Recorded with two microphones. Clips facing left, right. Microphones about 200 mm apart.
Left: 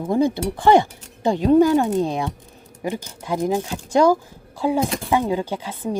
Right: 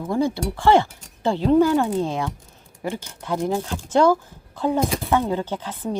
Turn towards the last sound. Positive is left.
turn(degrees=10)  # may be behind; listen again after turning